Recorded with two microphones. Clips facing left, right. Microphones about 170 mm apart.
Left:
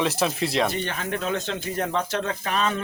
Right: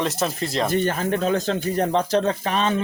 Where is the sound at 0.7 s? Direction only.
40° right (ahead or behind).